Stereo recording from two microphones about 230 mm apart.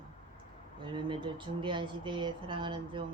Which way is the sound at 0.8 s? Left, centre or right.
Right.